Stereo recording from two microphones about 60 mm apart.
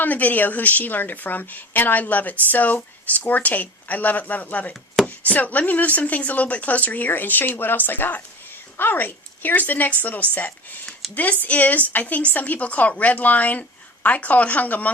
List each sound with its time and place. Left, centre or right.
0.0 s a woman's voice: left